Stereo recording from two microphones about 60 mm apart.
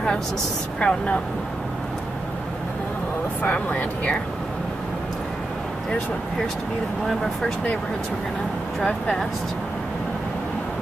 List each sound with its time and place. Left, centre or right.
0.7 s speech: centre
3.4 s speech: left
8.8 s speech: centre